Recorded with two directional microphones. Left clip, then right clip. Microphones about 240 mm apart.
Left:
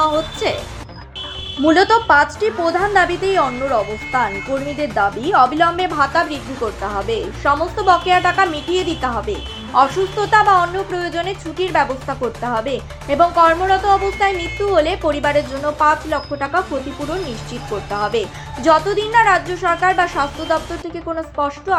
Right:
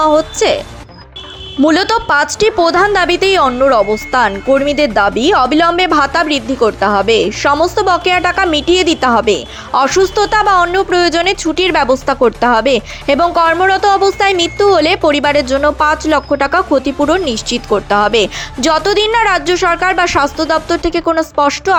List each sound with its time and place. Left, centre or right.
0.0 s a woman's voice: right
1.6 s a woman's voice: right